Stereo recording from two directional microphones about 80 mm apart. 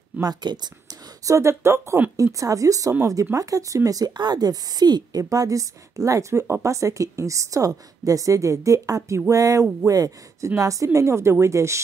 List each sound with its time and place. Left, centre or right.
0.2 s speech: right
1.2 s a woman's voice: right
4.2 s a woman's voice: right